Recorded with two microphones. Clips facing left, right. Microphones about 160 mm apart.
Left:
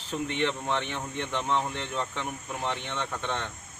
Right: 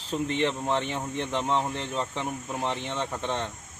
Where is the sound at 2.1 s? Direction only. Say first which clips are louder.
Right 3 dB; 30° right (ahead or behind).